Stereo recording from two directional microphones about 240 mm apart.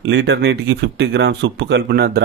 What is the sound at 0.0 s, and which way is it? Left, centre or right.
Speech, right.